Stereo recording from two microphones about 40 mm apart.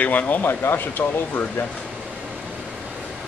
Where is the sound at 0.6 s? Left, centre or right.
Left.